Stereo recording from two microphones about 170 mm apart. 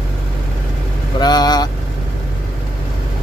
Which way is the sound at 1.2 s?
25° left (ahead or behind).